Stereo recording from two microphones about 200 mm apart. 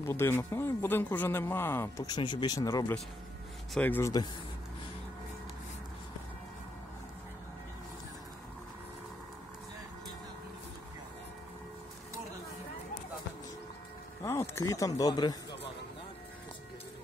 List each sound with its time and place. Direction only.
0.0 s speech: 10° left (ahead or behind)
14.2 s speech: 15° left (ahead or behind)